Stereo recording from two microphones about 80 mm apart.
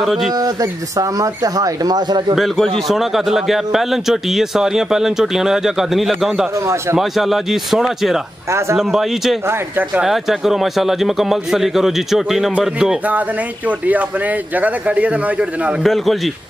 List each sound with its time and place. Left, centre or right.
0.0 s a man's voice: centre
0.3 s speech: right
2.3 s a man's voice: centre
8.5 s speech: right
8.7 s a man's voice: centre
13.7 s speech: centre
15.8 s a man's voice: centre